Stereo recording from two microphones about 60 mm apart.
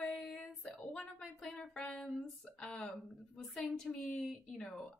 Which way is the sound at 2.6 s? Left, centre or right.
Centre.